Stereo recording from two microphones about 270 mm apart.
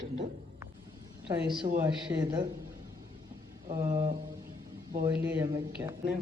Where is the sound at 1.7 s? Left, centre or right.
Centre.